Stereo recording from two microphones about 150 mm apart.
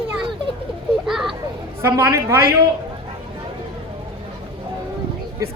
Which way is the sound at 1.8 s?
20° right (ahead or behind).